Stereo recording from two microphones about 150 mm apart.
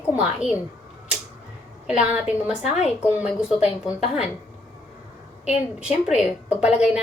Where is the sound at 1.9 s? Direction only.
5° right (ahead or behind).